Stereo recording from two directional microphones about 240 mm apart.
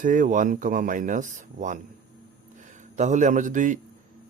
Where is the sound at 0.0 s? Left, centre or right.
Right.